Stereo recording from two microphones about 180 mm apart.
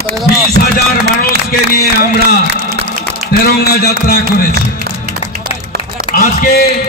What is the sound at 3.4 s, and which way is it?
Speech, 60° left (ahead or behind).